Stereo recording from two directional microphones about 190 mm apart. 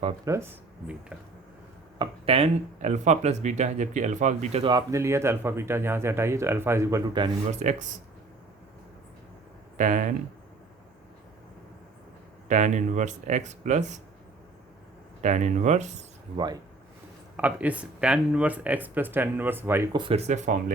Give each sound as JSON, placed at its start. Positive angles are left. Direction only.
{"t": 0.3, "sound": "speech", "side_deg": -15}
{"t": 2.0, "sound": "speech", "side_deg": -30}
{"t": 4.7, "sound": "speech", "side_deg": -15}
{"t": 7.5, "sound": "speech", "side_deg": -40}
{"t": 9.7, "sound": "speech", "side_deg": -40}
{"t": 12.5, "sound": "speech", "side_deg": -40}
{"t": 15.2, "sound": "speech", "side_deg": -40}
{"t": 17.3, "sound": "speech", "side_deg": -10}
{"t": 19.9, "sound": "speech", "side_deg": -25}